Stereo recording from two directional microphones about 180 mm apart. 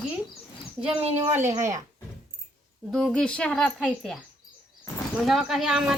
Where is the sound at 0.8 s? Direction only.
5° right (ahead or behind).